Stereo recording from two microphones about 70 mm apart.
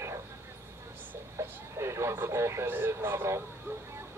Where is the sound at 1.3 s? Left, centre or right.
Right.